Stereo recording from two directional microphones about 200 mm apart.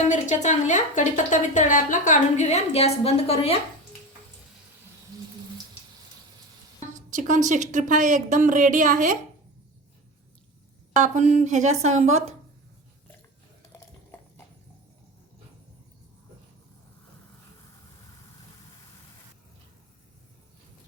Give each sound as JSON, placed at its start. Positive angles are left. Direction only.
{"t": 0.1, "sound": "a woman's voice", "side_deg": 35}
{"t": 6.7, "sound": "speech", "side_deg": -40}
{"t": 10.9, "sound": "speech", "side_deg": -40}